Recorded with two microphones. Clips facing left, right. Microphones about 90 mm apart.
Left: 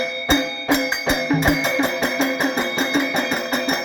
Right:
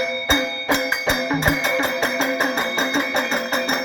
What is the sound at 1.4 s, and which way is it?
Music, 10° left (ahead or behind).